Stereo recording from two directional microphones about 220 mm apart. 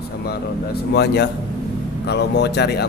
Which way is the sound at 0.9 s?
50° left (ahead or behind).